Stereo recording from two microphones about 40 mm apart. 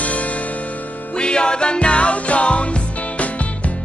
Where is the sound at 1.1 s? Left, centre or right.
Left.